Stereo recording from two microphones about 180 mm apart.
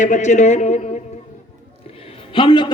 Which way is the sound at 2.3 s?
25° left (ahead or behind).